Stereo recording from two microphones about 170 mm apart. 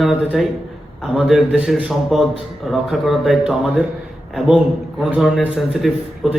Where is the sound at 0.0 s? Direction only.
Centre (ahead or behind).